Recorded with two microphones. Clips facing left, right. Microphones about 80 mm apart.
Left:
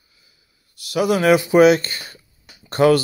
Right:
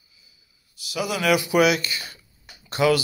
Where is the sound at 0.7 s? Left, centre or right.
Left.